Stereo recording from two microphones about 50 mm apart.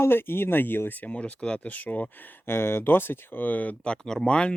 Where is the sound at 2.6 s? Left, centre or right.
Left.